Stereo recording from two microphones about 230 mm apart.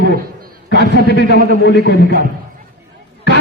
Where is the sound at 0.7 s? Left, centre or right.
Left.